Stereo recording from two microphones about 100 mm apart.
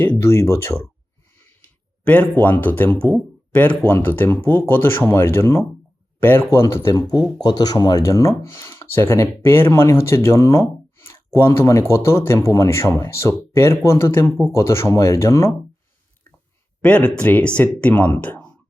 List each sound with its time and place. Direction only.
0.0 s speech: 25° left (ahead or behind)
2.0 s speech: 15° left (ahead or behind)
7.4 s speech: 40° left (ahead or behind)
16.8 s speech: 15° left (ahead or behind)